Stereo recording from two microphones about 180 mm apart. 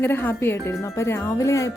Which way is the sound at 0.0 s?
10° left (ahead or behind).